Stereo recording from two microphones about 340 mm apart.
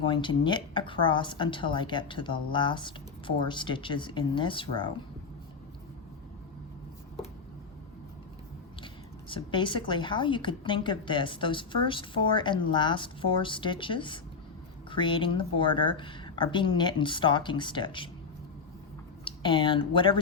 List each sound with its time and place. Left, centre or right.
0.1 s a woman's voice: centre
9.3 s a woman's voice: centre
19.2 s speech: centre